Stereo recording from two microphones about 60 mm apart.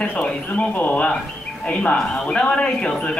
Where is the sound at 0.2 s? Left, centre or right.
Left.